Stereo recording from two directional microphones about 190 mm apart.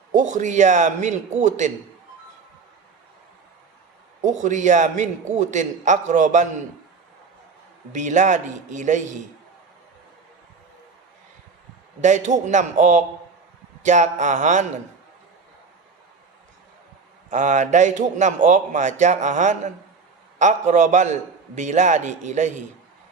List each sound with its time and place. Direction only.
0.1 s a man's voice: 40° right (ahead or behind)
4.2 s a man's voice: 40° right (ahead or behind)
7.9 s a man's voice: 40° right (ahead or behind)
11.9 s a man's voice: 40° right (ahead or behind)
17.2 s a man's voice: 40° right (ahead or behind)